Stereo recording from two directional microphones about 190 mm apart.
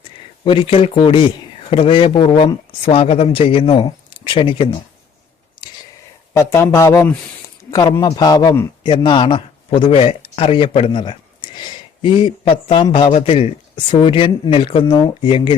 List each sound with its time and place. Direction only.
0.4 s a man's voice: 30° left (ahead or behind)
5.6 s a sound: 25° left (ahead or behind)
6.3 s a man's voice: 15° left (ahead or behind)